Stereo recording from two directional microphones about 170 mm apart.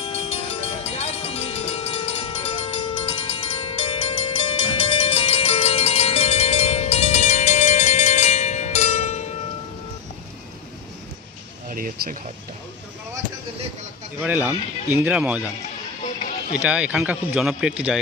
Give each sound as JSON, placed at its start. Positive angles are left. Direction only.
{"t": 0.0, "sound": "music", "side_deg": 35}
{"t": 0.8, "sound": "cowbell", "side_deg": 35}
{"t": 11.7, "sound": "a sound", "side_deg": -55}
{"t": 14.2, "sound": "speech", "side_deg": -10}
{"t": 16.5, "sound": "speech", "side_deg": -10}